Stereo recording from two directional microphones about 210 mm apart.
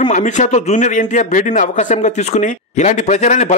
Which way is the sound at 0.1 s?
35° left (ahead or behind).